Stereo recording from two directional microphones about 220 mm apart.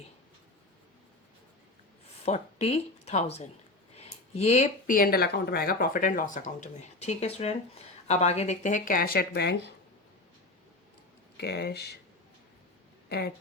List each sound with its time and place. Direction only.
2.2 s speech: 30° left (ahead or behind); by 9.7 s 50° left (ahead or behind)
11.3 s speech: 50° left (ahead or behind)
13.1 s speech: 50° left (ahead or behind)